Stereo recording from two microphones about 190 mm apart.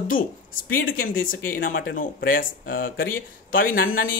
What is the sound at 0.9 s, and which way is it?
Speech, 50° left (ahead or behind).